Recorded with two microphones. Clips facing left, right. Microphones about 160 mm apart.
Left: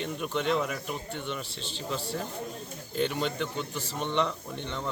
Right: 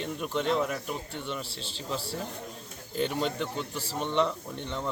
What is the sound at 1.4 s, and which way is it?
Speech, 35° right (ahead or behind).